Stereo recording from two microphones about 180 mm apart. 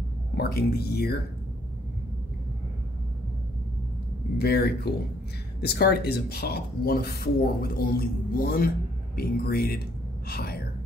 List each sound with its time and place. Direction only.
0.4 s speech: 60° left (ahead or behind)
4.4 s speech: 65° left (ahead or behind)